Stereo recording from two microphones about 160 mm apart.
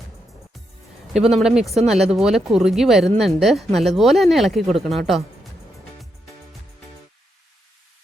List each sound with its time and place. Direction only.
1.4 s a woman's voice: centre (ahead or behind)